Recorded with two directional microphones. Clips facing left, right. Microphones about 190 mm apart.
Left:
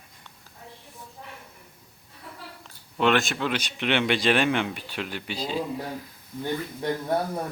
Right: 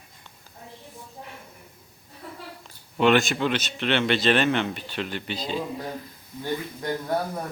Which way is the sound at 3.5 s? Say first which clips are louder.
Right 1 dB; 15° left (ahead or behind).